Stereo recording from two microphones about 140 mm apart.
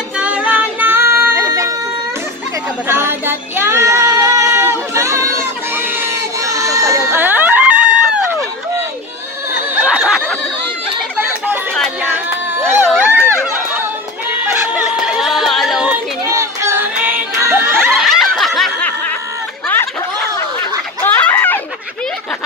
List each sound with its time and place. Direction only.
0.2 s music: 10° right (ahead or behind); by 1.8 s 25° right (ahead or behind)
2.9 s child singing: 15° right (ahead or behind)
9.8 s a sound: 5° right (ahead or behind)
12.0 s crowd: 15° right (ahead or behind)
13.0 s run: 15° right (ahead or behind)
14.4 s a sound: 10° right (ahead or behind)
16.3 s music: 20° right (ahead or behind)
17.9 s snicker: centre (ahead or behind)
21.0 s a sound: 15° left (ahead or behind)